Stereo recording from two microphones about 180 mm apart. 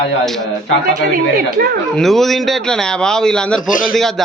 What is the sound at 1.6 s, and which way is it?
Speech, 55° right (ahead or behind).